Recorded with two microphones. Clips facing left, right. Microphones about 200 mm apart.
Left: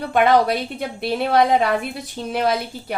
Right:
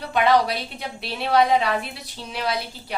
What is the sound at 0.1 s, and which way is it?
A woman's voice, 50° left (ahead or behind).